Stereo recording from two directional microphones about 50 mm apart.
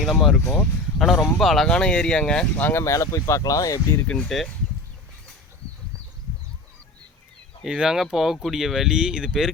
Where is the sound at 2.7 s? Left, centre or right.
Left.